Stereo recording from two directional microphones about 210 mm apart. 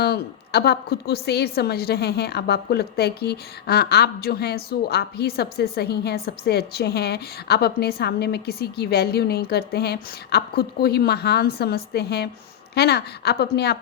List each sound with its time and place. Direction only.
0.0 s a woman's voice: 50° left (ahead or behind)